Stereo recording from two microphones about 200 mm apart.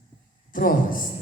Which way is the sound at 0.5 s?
45° left (ahead or behind).